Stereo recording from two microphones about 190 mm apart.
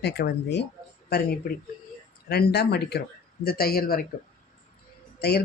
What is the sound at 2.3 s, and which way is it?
Speech, 55° left (ahead or behind).